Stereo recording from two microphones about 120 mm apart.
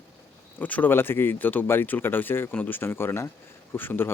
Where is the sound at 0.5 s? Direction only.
15° left (ahead or behind).